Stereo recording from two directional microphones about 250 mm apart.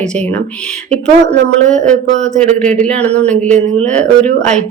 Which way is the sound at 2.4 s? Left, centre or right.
Centre.